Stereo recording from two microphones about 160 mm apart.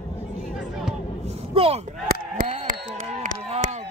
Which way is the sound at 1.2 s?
40° right (ahead or behind).